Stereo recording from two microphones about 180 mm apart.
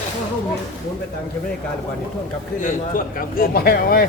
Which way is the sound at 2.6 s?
50° left (ahead or behind).